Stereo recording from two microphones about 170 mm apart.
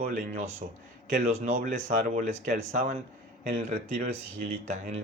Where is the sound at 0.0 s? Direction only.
45° right (ahead or behind).